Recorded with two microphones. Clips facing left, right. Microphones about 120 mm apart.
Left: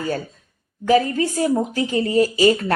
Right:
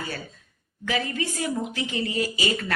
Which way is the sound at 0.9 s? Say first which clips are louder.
Left 11 dB; 40° left (ahead or behind).